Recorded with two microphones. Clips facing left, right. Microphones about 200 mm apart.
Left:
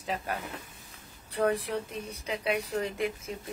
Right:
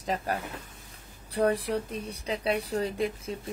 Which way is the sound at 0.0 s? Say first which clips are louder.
Right 3 dB; 35° right (ahead or behind).